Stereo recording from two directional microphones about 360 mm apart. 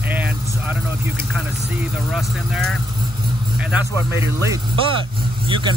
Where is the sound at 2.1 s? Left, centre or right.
Centre.